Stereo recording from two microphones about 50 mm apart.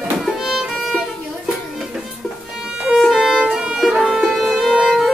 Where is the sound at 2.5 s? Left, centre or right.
Centre.